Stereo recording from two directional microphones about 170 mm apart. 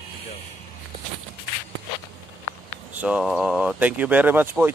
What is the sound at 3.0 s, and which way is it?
Speech, 5° right (ahead or behind).